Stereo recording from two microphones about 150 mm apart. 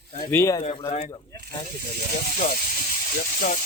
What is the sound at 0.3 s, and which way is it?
Speech, 20° left (ahead or behind).